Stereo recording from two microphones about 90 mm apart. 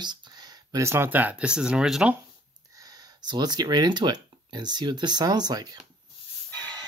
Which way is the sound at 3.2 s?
50° right (ahead or behind).